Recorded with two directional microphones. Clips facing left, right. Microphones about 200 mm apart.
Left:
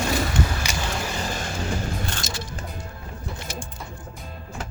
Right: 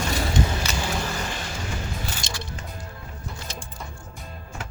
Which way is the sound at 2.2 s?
Centre (ahead or behind).